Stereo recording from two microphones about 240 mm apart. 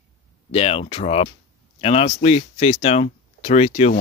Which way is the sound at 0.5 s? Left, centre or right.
Left.